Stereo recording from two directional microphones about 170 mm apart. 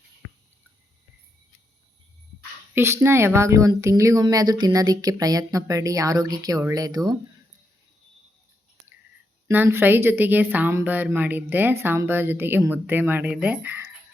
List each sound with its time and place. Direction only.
2.7 s speech: 15° right (ahead or behind)
9.5 s speech: 15° right (ahead or behind)